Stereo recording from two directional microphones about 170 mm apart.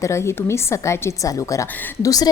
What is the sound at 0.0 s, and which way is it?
A woman's voice, 15° left (ahead or behind).